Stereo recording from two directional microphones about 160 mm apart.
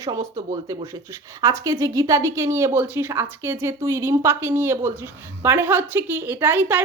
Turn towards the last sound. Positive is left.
turn(degrees=-10)  # may be behind; listen again after turning